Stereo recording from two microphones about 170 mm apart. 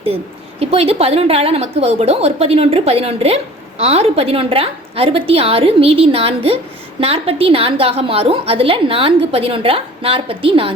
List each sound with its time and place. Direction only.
0.6 s a woman's voice: 35° right (ahead or behind)